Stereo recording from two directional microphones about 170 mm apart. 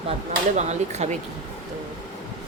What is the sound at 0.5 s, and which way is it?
Speech, 40° right (ahead or behind).